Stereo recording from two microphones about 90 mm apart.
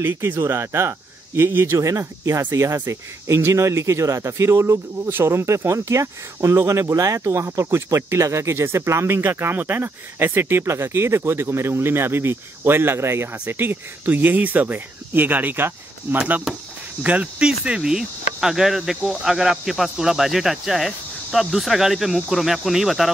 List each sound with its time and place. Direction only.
0.0 s speech: 25° right (ahead or behind); by 23.1 s centre (ahead or behind)